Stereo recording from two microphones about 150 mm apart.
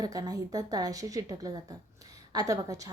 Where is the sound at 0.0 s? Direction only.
25° right (ahead or behind).